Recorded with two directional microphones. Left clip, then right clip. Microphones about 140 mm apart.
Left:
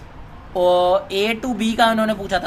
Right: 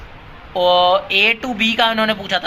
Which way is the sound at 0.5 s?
40° left (ahead or behind).